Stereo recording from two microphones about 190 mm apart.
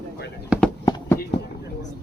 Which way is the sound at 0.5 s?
5° right (ahead or behind).